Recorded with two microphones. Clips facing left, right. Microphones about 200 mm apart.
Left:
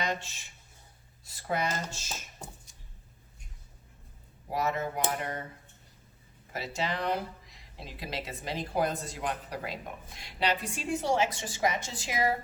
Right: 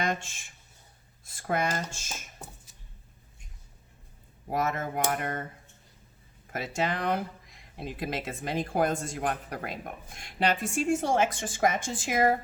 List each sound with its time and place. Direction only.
0.0 s speech: 50° right (ahead or behind)
4.5 s speech: 50° right (ahead or behind)
6.5 s speech: 50° right (ahead or behind)